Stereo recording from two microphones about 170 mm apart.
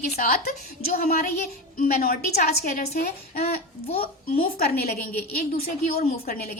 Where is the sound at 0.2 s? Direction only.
55° left (ahead or behind).